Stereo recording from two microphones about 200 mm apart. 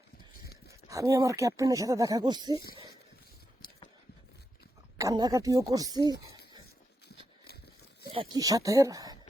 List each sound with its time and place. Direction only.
0.9 s speech: 15° right (ahead or behind)
4.9 s speech: 20° right (ahead or behind)
8.1 s speech: 20° right (ahead or behind)